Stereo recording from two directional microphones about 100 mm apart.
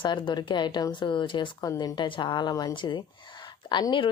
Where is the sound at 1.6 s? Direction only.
40° left (ahead or behind).